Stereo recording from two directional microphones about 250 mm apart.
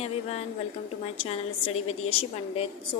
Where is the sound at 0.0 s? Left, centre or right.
Left.